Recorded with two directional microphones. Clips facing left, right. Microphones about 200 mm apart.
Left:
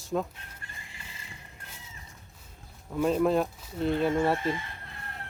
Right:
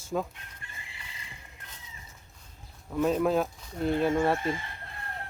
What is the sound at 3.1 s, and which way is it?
Speech, centre (ahead or behind).